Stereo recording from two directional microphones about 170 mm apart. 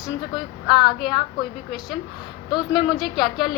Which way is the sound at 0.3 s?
25° left (ahead or behind).